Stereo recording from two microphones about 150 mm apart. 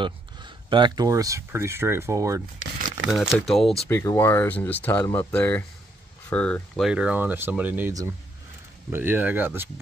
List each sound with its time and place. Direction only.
0.0 s speech: 30° right (ahead or behind)
3.1 s speech: 5° left (ahead or behind)
3.9 s speech: 20° left (ahead or behind)
6.9 s speech: 5° right (ahead or behind)
8.9 s speech: 15° right (ahead or behind)